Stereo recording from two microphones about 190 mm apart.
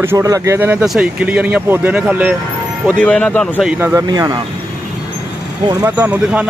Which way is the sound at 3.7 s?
10° right (ahead or behind).